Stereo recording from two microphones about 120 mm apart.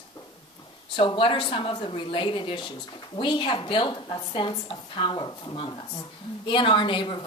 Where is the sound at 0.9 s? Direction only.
45° left (ahead or behind).